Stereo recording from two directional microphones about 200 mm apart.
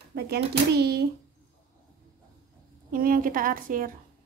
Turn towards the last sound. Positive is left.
turn(degrees=-45)  # may be behind; listen again after turning